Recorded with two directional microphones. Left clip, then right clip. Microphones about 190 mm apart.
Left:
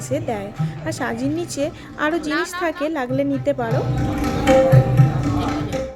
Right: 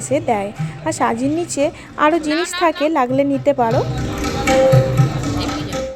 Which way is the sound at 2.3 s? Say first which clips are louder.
Right 3 dB; 15° left (ahead or behind).